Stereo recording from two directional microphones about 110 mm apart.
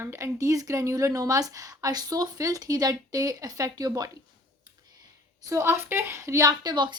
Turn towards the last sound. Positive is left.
turn(degrees=-40)  # may be behind; listen again after turning